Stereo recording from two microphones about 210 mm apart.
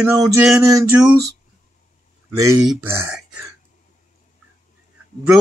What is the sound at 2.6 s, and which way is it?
Speech, 5° right (ahead or behind).